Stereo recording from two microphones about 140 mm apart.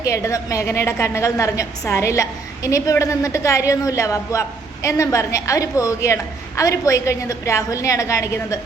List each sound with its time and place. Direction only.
0.0 s a woman's voice: 20° left (ahead or behind)